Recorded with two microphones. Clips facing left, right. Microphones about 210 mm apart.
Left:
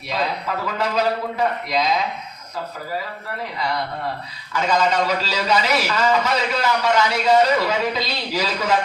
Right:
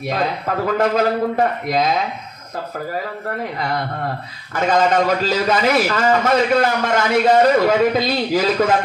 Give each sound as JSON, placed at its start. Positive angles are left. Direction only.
{"t": 0.0, "sound": "a man's voice", "side_deg": -50}
{"t": 4.5, "sound": "a man's voice", "side_deg": -50}